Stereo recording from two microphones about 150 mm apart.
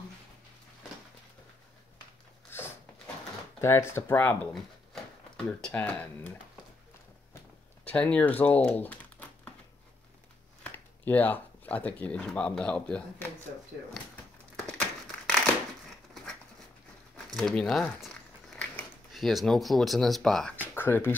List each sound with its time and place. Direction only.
2.5 s a sound: 15° left (ahead or behind)
3.6 s speech: 15° left (ahead or behind)
5.7 s speech: 10° left (ahead or behind)
7.8 s speech: 10° left (ahead or behind)
10.6 s speech: 10° left (ahead or behind)
14.7 s crumpling: 5° left (ahead or behind)
17.3 s speech: 5° left (ahead or behind)